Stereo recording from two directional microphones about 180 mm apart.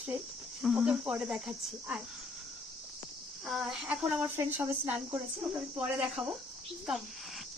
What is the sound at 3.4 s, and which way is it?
Speech, centre (ahead or behind).